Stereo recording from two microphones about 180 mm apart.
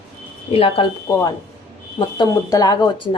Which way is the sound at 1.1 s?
15° left (ahead or behind).